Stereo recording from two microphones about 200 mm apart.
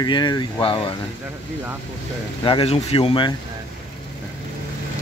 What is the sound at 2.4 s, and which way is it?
Speech, 25° left (ahead or behind).